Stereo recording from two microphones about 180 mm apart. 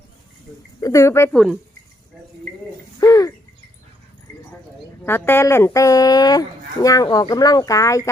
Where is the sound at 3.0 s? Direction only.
20° left (ahead or behind).